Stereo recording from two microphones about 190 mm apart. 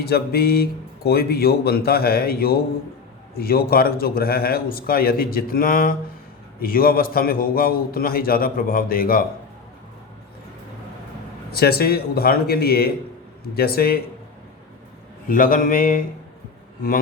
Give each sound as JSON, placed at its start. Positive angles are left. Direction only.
{"t": 0.0, "sound": "speech", "side_deg": 55}
{"t": 11.5, "sound": "speech", "side_deg": 55}
{"t": 15.3, "sound": "speech", "side_deg": 45}